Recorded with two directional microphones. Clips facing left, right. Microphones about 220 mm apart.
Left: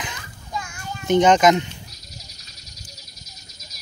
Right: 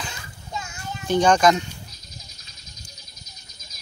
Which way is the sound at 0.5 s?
25° right (ahead or behind).